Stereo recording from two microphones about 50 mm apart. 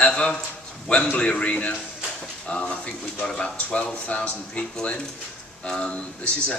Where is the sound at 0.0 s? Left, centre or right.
Left.